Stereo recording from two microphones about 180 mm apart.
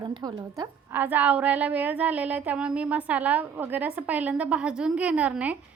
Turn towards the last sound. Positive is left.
turn(degrees=-10)  # may be behind; listen again after turning